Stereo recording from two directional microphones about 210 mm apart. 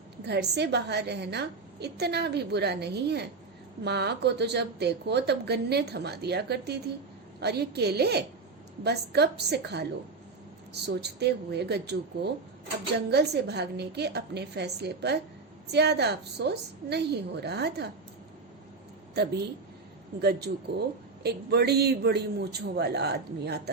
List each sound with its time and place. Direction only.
0.3 s a woman's voice: 55° right (ahead or behind)
19.1 s a woman's voice: 50° right (ahead or behind)
21.2 s a woman's voice: 50° right (ahead or behind)